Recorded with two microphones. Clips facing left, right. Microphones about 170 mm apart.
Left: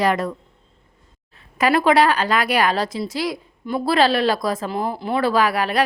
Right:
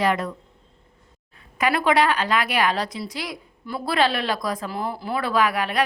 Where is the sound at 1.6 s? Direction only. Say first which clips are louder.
Left 4 dB; 35° left (ahead or behind).